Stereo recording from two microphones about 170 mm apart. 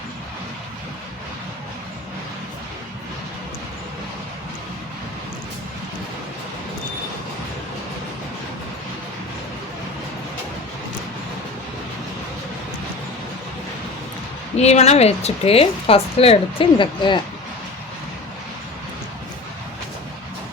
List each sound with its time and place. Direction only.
14.5 s speech: 40° left (ahead or behind)